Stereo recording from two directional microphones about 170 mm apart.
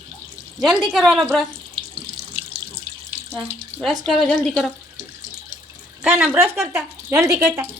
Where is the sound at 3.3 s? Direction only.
5° left (ahead or behind).